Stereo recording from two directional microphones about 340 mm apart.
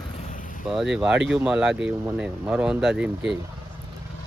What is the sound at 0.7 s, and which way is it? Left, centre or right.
Speech, centre.